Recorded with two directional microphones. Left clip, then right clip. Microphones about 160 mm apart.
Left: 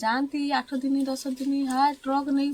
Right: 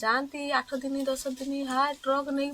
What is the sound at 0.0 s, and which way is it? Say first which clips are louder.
Speech: left 1 dB; 15° right (ahead or behind).